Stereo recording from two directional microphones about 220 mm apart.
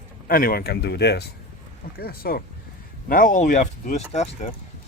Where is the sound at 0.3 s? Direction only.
40° left (ahead or behind).